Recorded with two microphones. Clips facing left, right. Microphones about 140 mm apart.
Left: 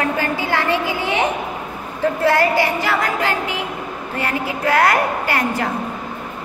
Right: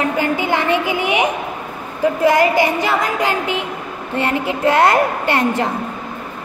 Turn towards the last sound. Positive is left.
turn(degrees=-25)  # may be behind; listen again after turning